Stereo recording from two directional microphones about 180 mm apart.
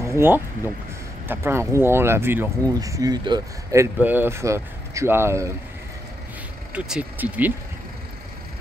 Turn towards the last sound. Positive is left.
turn(degrees=-10)  # may be behind; listen again after turning